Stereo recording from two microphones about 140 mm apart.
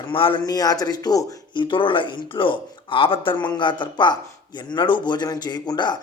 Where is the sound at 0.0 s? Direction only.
40° left (ahead or behind).